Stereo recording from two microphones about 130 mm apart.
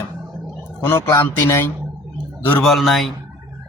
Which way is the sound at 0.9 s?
20° left (ahead or behind).